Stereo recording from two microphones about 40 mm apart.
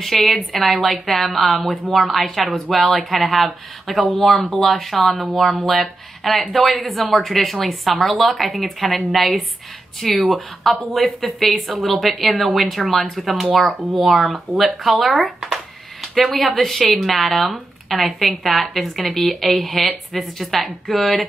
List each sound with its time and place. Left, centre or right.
0.0 s speech: centre